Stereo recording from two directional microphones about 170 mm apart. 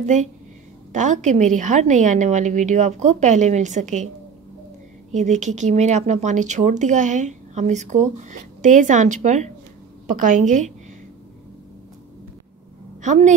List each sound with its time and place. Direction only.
0.0 s speech: 45° right (ahead or behind)
5.1 s speech: 45° right (ahead or behind)
13.0 s speech: 45° right (ahead or behind)